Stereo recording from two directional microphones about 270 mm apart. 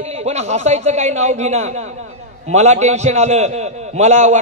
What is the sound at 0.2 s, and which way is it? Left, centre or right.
A man's voice, right.